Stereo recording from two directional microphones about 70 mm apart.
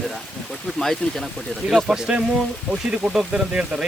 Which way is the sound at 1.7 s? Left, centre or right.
Centre.